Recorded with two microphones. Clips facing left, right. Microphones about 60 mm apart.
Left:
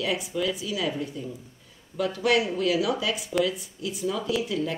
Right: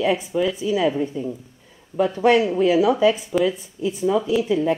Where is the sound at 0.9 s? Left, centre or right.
Centre.